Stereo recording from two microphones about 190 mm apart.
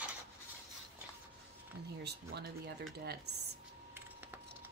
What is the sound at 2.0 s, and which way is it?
Speech, 60° right (ahead or behind).